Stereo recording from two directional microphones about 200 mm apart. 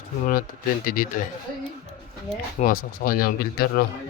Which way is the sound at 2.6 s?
45° left (ahead or behind).